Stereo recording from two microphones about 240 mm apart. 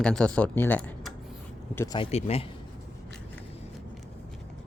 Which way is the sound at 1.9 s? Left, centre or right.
Left.